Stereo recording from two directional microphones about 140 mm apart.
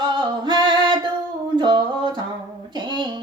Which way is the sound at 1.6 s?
30° right (ahead or behind).